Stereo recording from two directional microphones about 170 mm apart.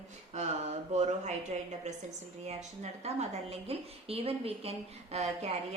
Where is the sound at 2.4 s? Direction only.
40° right (ahead or behind).